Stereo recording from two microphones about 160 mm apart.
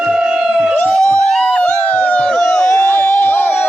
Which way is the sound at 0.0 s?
5° right (ahead or behind).